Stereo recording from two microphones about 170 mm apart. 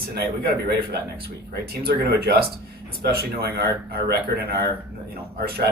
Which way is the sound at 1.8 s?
65° right (ahead or behind).